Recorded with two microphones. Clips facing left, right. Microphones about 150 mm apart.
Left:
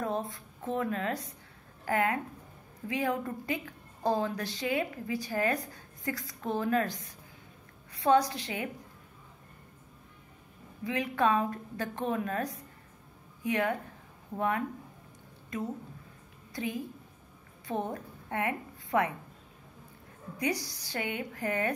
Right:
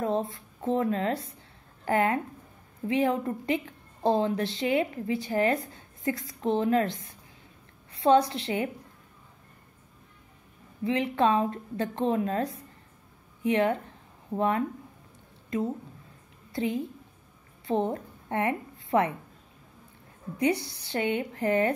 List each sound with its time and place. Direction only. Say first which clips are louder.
0.0 s a woman's voice: right 5 dB; 25° right (ahead or behind)
10.8 s a woman's voice: right 4 dB; 25° right (ahead or behind)
16.5 s a woman's voice: right 6 dB; 25° right (ahead or behind)
20.3 s a woman's voice: right 6 dB; 25° right (ahead or behind)